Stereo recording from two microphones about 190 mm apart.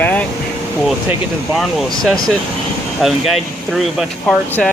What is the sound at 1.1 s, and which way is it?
Speech, centre (ahead or behind).